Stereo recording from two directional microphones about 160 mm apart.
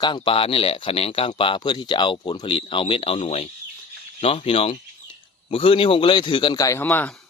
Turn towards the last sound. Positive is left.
turn(degrees=10)  # may be behind; listen again after turning